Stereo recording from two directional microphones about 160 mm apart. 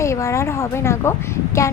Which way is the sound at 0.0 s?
15° left (ahead or behind).